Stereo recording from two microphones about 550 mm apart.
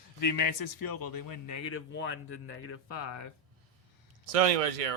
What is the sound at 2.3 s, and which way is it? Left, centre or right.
Speech, left.